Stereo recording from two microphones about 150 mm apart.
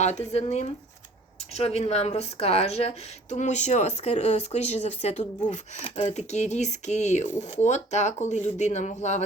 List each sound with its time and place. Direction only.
0.0 s a woman's voice: 50° left (ahead or behind)